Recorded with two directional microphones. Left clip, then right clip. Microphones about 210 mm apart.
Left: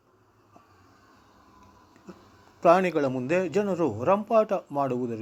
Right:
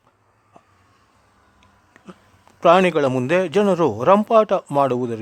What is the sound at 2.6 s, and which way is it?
A man's voice, 25° right (ahead or behind).